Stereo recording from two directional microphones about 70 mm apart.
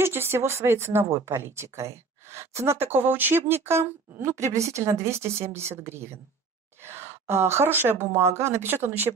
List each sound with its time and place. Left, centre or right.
0.0 s a woman's voice: right